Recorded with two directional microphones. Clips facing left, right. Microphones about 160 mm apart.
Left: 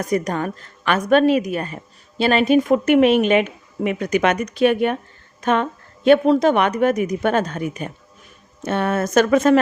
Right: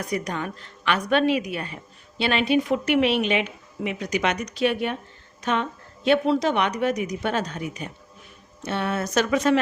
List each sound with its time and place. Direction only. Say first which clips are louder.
0.0 s a woman's voice: left 7 dB; 45° left (ahead or behind)